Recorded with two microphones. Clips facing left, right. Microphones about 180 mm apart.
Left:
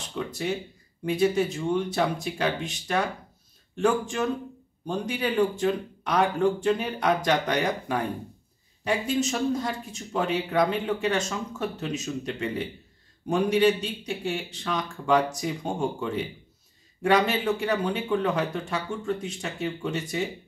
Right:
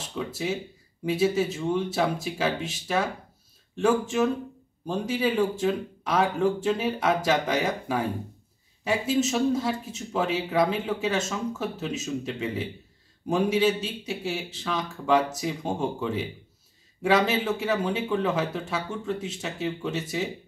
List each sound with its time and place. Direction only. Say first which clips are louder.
0.1 s speech: even; 5° right (ahead or behind)
4.1 s speech: right 3 dB; 5° right (ahead or behind)